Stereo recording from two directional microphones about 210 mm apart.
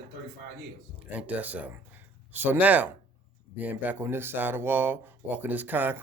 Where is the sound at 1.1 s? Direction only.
5° right (ahead or behind).